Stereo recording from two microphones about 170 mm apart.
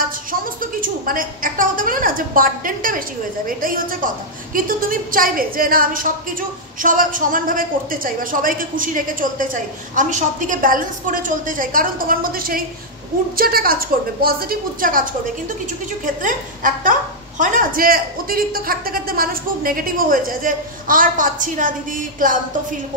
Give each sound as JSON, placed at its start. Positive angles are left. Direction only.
{"t": 0.3, "sound": "a woman's voice", "side_deg": -55}
{"t": 16.2, "sound": "a woman's voice", "side_deg": -50}